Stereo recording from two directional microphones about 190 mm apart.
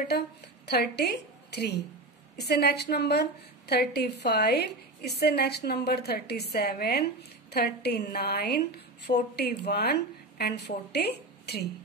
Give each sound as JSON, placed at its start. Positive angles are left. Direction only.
{"t": 0.1, "sound": "a woman's voice", "side_deg": 60}